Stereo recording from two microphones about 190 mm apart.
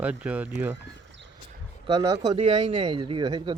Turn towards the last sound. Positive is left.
turn(degrees=-25)  # may be behind; listen again after turning